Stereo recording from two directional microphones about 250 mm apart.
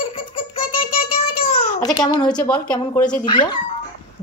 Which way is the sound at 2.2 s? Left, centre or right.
Centre.